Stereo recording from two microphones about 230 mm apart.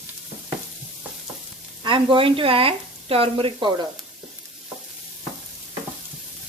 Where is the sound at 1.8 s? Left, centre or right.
Right.